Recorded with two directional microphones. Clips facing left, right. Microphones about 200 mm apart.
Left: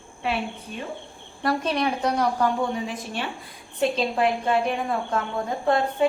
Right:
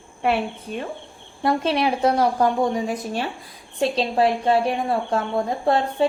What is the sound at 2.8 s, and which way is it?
A woman's voice, 40° right (ahead or behind).